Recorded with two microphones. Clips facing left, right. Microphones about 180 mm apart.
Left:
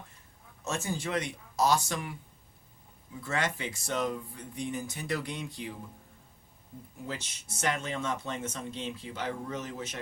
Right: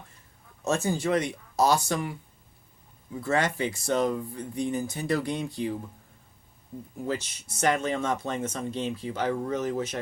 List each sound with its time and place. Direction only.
0.6 s speech: 35° right (ahead or behind)
3.2 s speech: 35° right (ahead or behind)
7.6 s speech: 40° right (ahead or behind)